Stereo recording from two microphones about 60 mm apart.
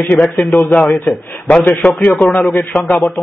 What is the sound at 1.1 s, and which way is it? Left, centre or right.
Speech, centre.